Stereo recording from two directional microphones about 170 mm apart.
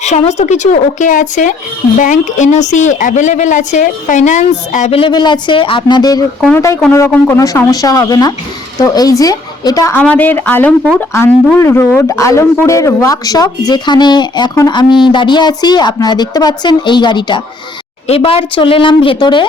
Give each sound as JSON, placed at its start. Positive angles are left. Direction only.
{"t": 0.0, "sound": "a woman's voice", "side_deg": 40}
{"t": 10.0, "sound": "a woman's voice", "side_deg": 10}